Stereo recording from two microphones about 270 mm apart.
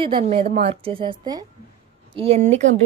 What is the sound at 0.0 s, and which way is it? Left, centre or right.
A woman's voice, right.